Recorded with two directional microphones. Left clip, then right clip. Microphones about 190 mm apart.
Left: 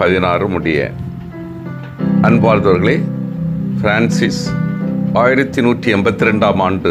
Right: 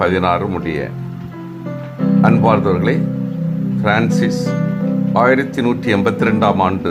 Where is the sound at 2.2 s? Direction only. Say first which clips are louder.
Left 2 dB; 15° left (ahead or behind).